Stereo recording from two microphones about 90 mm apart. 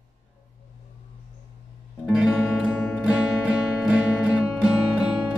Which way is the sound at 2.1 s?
10° right (ahead or behind).